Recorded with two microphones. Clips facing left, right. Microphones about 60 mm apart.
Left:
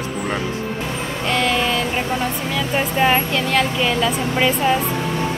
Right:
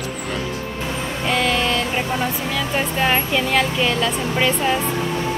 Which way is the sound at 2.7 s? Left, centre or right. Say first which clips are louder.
Left 3 dB; centre.